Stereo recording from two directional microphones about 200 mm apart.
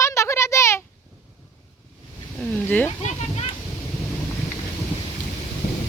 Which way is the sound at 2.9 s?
35° left (ahead or behind).